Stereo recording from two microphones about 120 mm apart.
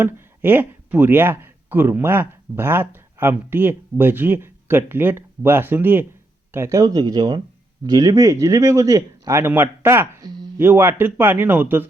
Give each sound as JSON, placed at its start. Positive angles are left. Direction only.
{"t": 0.0, "sound": "speech", "side_deg": -15}
{"t": 10.2, "sound": "a sound", "side_deg": -35}
{"t": 10.6, "sound": "speech", "side_deg": -20}